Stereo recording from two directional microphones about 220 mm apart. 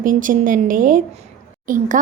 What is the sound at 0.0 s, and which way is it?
A woman's voice, 35° right (ahead or behind).